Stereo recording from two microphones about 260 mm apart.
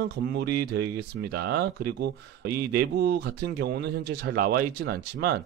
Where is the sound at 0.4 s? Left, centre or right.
Right.